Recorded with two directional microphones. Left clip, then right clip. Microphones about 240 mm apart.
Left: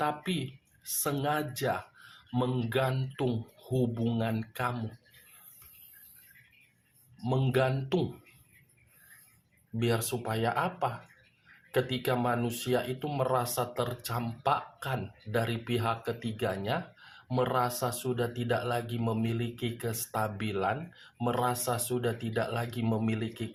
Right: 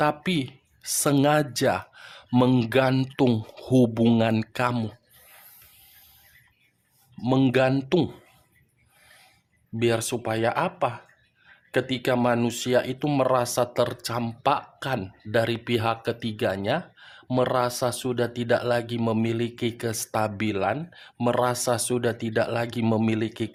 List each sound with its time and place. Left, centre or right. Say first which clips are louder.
0.0 s speech: right 8 dB; right
7.2 s speech: right 8 dB; right
9.7 s speech: right 7 dB; right